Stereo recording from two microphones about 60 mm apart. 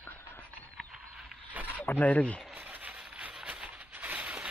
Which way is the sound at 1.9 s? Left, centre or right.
Left.